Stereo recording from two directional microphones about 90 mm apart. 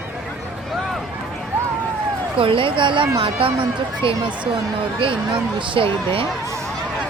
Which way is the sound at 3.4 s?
90° right.